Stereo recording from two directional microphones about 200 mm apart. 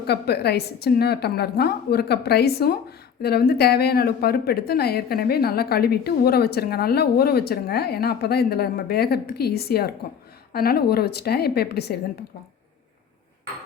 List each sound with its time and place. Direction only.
0.1 s a woman's voice: 55° left (ahead or behind)